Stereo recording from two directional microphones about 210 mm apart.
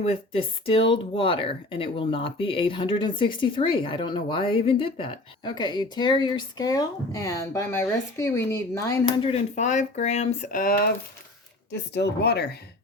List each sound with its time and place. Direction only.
0.0 s speech: 25° left (ahead or behind)
9.2 s speech: 30° left (ahead or behind); by 12.5 s 50° left (ahead or behind)